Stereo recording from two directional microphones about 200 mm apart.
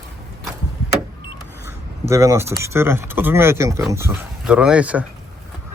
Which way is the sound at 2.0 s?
15° right (ahead or behind).